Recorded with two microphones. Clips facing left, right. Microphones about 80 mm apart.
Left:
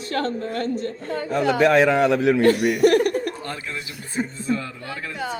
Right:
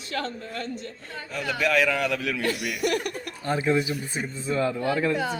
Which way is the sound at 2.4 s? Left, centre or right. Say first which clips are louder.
Left 11 dB; left.